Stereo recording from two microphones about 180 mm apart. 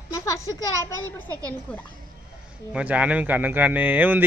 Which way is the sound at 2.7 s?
5° right (ahead or behind).